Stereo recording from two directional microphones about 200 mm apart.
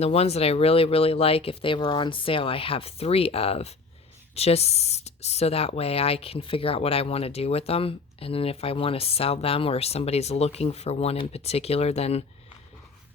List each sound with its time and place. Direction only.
0.0 s speech: 30° left (ahead or behind)